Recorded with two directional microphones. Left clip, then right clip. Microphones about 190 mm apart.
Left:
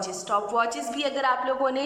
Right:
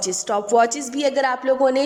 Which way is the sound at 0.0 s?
40° right (ahead or behind).